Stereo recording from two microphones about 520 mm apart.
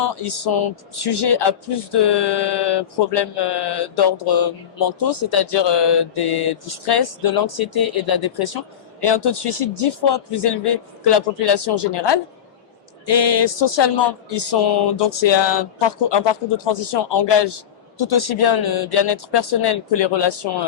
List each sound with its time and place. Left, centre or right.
0.0 s a man's voice: left